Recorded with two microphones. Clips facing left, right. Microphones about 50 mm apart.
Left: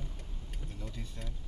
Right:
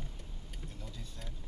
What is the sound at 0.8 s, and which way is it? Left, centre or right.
Speech, left.